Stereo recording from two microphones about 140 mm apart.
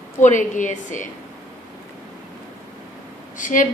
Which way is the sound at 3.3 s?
70° left (ahead or behind).